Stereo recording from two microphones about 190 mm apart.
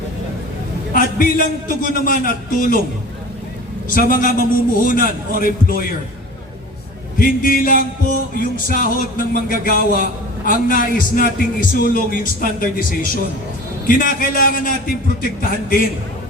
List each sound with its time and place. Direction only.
0.9 s speech: 50° left (ahead or behind)
3.8 s speech: 45° left (ahead or behind)
7.2 s speech: 45° left (ahead or behind)